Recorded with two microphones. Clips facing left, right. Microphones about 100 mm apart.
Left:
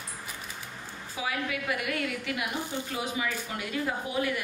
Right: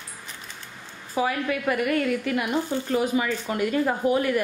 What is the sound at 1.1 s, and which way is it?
A woman's voice, 45° right (ahead or behind).